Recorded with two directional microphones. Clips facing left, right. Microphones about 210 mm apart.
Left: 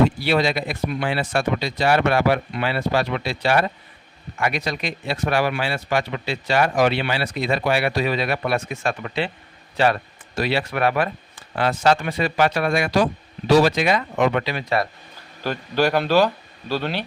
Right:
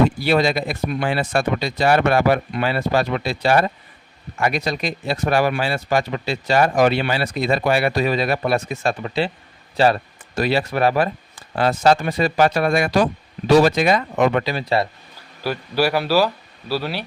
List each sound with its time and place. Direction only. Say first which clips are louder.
0.2 s speech: right 2 dB; 45° right (ahead or behind)
15.4 s speech: even; 10° right (ahead or behind)